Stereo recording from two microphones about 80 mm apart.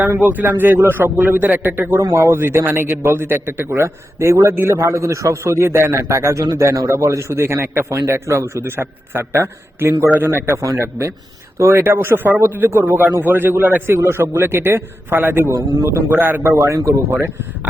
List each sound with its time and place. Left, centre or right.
0.0 s a man's voice: right
2.0 s a man's voice: right
6.7 s a man's voice: right
15.5 s a man's voice: right
17.1 s a man's voice: right